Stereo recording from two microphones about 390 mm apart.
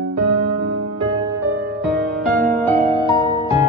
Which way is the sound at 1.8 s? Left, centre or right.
Centre.